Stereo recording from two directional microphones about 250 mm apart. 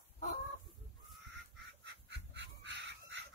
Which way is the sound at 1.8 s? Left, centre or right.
Right.